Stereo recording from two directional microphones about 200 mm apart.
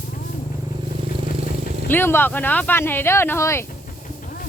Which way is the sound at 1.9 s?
10° left (ahead or behind).